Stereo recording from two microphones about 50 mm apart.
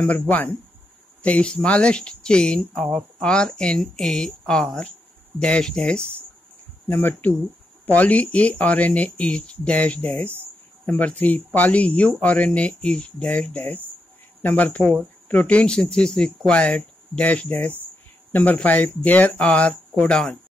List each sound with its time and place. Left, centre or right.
0.0 s speech: left
6.9 s speech: left; by 16.5 s centre
16.5 s speech: left
20.1 s speech: centre